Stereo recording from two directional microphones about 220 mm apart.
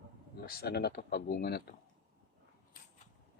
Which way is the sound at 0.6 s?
45° left (ahead or behind).